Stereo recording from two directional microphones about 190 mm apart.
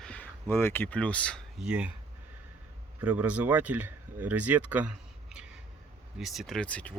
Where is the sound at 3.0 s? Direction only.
5° right (ahead or behind).